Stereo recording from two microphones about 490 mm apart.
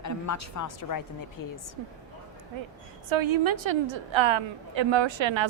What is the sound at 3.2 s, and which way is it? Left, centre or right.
A woman's voice, right.